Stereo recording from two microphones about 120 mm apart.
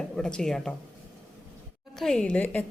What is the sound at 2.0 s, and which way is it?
Speech, 5° left (ahead or behind).